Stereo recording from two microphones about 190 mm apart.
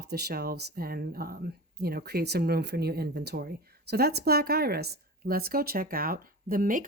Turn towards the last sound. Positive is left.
turn(degrees=-45)  # may be behind; listen again after turning